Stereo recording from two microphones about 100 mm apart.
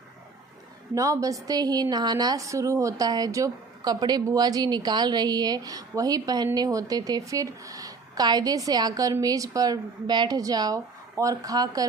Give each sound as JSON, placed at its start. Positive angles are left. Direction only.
{"t": 0.9, "sound": "a woman's voice", "side_deg": -35}